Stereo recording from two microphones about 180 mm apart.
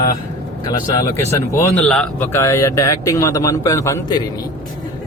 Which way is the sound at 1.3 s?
15° left (ahead or behind).